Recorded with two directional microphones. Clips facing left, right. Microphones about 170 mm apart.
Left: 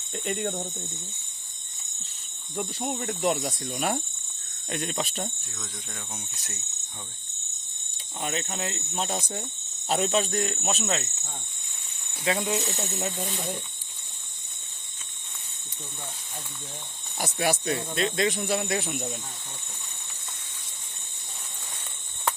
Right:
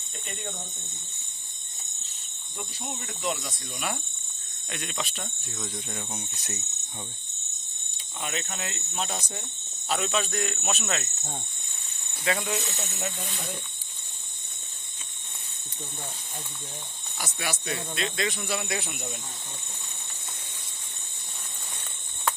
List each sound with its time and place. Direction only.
0.3 s speech: 65° left (ahead or behind)
2.6 s cricket: 50° left (ahead or behind)
4.7 s speech: 40° left (ahead or behind)
5.5 s speech: 15° right (ahead or behind)
6.1 s speech: centre (ahead or behind)
8.2 s speech: 40° left (ahead or behind)
8.4 s speech: 25° left (ahead or behind)
9.9 s speech: 40° left (ahead or behind)
10.2 s speech: 30° left (ahead or behind)
10.8 s speech: 20° left (ahead or behind)
12.2 s speech: 20° left (ahead or behind)
12.6 s speech: 35° left (ahead or behind)
17.3 s cricket: 40° left (ahead or behind)
17.9 s speech: 40° left (ahead or behind)